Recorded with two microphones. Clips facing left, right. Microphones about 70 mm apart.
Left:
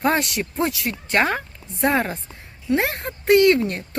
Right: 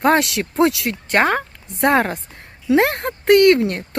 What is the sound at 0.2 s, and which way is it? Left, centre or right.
Speech, right.